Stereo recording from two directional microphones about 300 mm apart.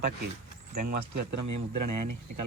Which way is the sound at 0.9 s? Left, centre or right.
Right.